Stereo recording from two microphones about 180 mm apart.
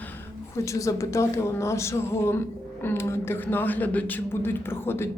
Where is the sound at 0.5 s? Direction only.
15° left (ahead or behind).